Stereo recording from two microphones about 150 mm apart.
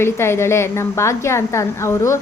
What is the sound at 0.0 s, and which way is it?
A woman's voice, 15° left (ahead or behind).